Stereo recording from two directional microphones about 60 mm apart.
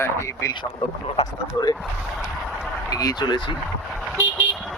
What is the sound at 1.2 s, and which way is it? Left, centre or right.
Speech, left.